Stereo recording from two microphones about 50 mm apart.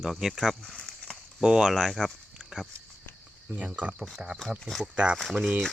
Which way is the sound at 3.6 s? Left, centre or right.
Right.